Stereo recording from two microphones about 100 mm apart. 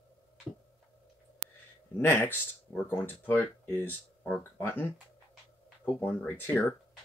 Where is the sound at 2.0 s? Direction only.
20° left (ahead or behind).